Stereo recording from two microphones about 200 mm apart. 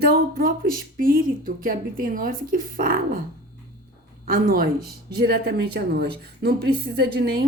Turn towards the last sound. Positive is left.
turn(degrees=-55)  # may be behind; listen again after turning